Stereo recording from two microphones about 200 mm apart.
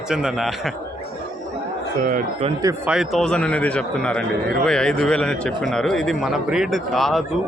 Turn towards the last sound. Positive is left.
turn(degrees=0)  # may be behind; listen again after turning